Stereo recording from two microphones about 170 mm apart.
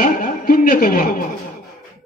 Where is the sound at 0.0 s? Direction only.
55° left (ahead or behind).